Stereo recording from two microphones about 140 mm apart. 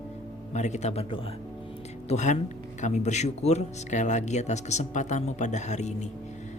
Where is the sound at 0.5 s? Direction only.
55° left (ahead or behind).